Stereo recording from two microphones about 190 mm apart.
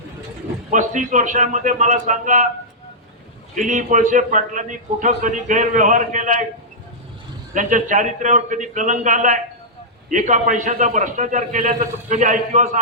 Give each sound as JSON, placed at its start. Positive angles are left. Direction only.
{"t": 0.7, "sound": "a man's voice", "side_deg": -40}
{"t": 3.5, "sound": "a man's voice", "side_deg": -40}
{"t": 7.5, "sound": "a man's voice", "side_deg": -40}